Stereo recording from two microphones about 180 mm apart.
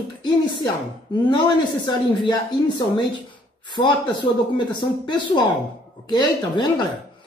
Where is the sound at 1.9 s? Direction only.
25° left (ahead or behind).